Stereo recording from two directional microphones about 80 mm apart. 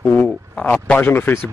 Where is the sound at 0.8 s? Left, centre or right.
Left.